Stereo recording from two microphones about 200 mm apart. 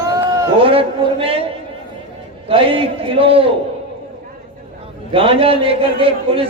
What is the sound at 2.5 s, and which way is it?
A man's voice, 25° right (ahead or behind).